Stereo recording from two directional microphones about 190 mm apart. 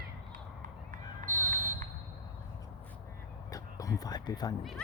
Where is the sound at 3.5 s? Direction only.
20° left (ahead or behind).